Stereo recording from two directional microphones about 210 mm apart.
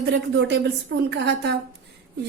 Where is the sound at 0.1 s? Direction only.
55° right (ahead or behind).